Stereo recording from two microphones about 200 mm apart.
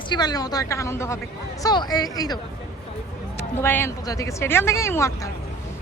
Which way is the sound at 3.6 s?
10° left (ahead or behind).